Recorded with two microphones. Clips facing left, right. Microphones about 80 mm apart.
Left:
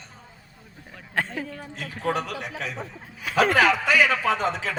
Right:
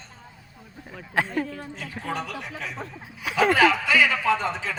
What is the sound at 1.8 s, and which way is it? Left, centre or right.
A man's voice, left.